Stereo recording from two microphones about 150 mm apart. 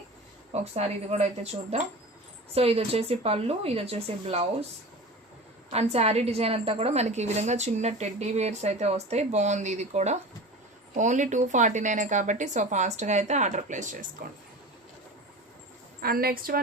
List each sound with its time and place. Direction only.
0.5 s a woman's voice: 45° right (ahead or behind)
5.7 s a woman's voice: 45° right (ahead or behind)
16.0 s a woman's voice: 80° right